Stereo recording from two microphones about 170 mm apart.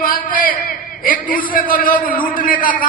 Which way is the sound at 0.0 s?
55° left (ahead or behind).